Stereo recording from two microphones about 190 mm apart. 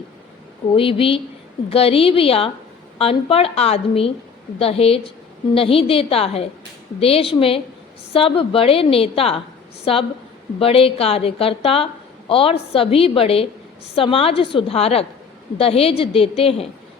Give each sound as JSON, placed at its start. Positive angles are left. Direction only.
{"t": 0.7, "sound": "a woman's voice", "side_deg": 30}